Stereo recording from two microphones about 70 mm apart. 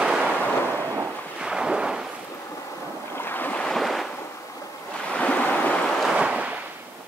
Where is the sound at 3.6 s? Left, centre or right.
Centre.